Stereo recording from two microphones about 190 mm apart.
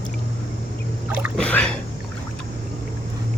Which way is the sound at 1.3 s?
5° left (ahead or behind).